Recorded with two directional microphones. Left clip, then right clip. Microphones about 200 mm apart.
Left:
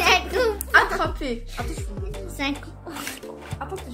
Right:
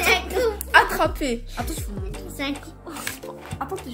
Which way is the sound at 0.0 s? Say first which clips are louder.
Left 1 dB; 40° left (ahead or behind).